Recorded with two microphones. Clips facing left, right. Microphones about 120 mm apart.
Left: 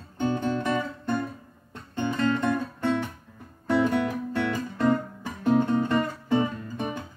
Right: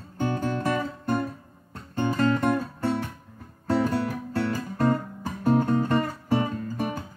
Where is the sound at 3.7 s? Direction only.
40° right (ahead or behind).